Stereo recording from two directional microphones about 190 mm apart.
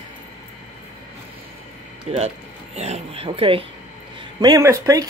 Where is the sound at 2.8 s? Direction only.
35° right (ahead or behind); by 5.0 s 15° right (ahead or behind).